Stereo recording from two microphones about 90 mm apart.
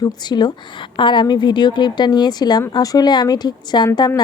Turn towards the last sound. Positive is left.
turn(degrees=55)  # may be behind; listen again after turning